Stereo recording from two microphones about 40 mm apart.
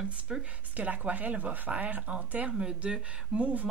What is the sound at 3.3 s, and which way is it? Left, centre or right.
Speech, right.